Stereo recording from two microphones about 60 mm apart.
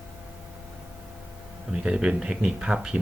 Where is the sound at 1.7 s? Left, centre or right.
Centre.